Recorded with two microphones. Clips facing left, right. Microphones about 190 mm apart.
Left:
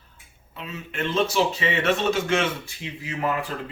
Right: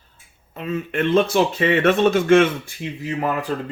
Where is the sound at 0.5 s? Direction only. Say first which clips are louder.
Right 10 dB; 55° right (ahead or behind).